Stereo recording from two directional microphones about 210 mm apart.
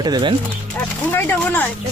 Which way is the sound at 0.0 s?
20° right (ahead or behind).